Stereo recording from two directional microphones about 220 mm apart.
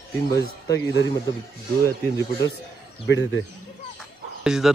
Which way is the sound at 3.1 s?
60° left (ahead or behind).